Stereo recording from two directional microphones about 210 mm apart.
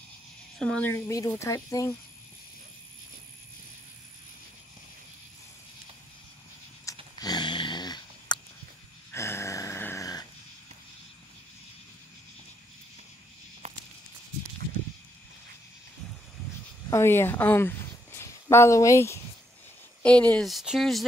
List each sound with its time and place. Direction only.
0.6 s speech: 5° left (ahead or behind)
7.2 s dog: 20° left (ahead or behind)
9.1 s a sound: 15° left (ahead or behind)
13.6 s walk: 30° right (ahead or behind)
16.9 s speech: 10° left (ahead or behind)